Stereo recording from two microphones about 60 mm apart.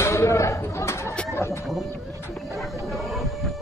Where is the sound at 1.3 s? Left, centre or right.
Left.